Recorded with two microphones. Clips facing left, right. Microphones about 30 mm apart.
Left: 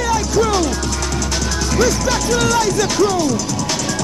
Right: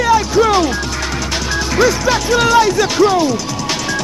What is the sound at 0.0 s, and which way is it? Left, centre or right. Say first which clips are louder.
Music: right 5 dB; right.